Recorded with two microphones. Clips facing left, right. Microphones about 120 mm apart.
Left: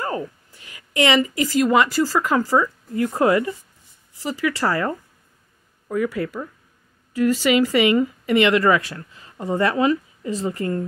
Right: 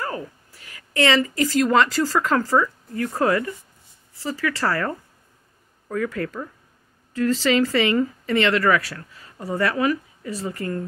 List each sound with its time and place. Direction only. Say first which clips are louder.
0.0 s a woman's voice: left 3 dB; 25° left (ahead or behind)